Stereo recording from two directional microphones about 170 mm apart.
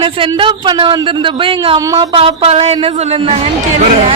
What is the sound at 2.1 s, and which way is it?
Speech, 35° right (ahead or behind).